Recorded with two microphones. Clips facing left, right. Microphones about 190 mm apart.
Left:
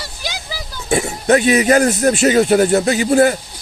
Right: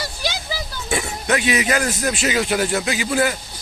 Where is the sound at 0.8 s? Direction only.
40° left (ahead or behind).